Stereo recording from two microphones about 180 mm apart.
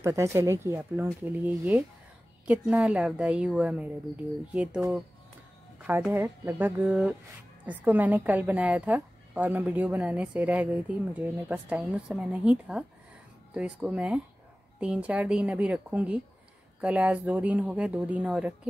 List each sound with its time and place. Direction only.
0.0 s a woman's voice: 15° right (ahead or behind)
5.8 s music: 10° right (ahead or behind)
6.1 s a woman's voice: 10° right (ahead or behind)